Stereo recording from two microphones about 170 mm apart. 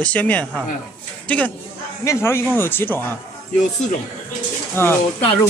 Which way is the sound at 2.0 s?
15° left (ahead or behind).